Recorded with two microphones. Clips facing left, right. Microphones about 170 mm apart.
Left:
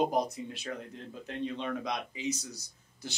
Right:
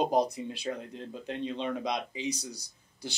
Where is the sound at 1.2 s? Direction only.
20° right (ahead or behind).